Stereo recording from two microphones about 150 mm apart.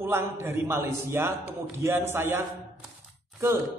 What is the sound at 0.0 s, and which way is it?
A man's voice, 15° right (ahead or behind).